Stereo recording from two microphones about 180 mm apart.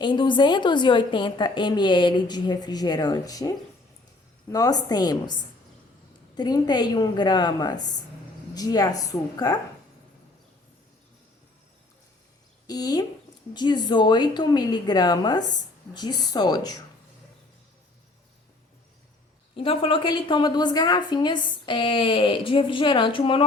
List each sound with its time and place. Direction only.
0.0 s a woman's voice: 25° left (ahead or behind)
12.6 s a woman's voice: 20° left (ahead or behind)
19.5 s a woman's voice: 30° left (ahead or behind)